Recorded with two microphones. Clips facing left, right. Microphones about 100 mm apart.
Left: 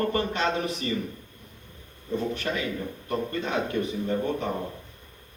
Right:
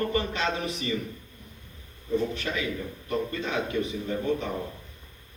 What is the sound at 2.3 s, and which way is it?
A man's voice, 50° left (ahead or behind).